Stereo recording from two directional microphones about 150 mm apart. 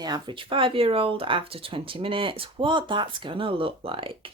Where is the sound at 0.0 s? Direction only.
30° right (ahead or behind).